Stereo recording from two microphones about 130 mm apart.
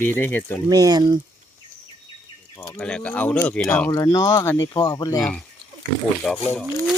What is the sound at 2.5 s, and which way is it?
Speech, 20° left (ahead or behind).